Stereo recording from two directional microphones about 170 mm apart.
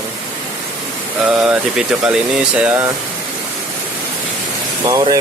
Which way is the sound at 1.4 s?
5° right (ahead or behind).